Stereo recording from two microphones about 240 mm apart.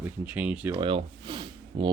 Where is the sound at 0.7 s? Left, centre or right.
Centre.